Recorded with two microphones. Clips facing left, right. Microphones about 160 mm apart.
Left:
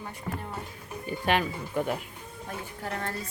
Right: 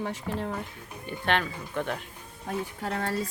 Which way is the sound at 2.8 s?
75° right (ahead or behind).